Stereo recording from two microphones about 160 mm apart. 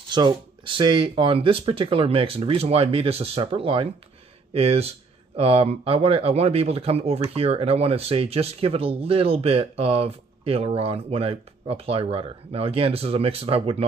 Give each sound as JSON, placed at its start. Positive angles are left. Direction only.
{"t": 0.1, "sound": "speech", "side_deg": -30}